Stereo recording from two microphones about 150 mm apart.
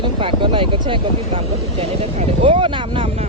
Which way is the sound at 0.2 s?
35° right (ahead or behind).